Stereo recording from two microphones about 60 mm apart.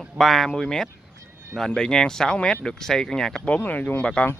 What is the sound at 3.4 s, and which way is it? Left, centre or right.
Speech, left.